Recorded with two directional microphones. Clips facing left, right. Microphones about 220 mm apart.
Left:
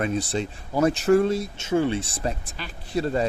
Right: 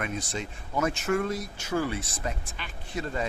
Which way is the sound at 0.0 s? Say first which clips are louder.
Left 8 dB; 30° left (ahead or behind).